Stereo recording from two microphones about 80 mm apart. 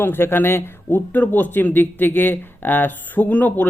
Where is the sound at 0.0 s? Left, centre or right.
Left.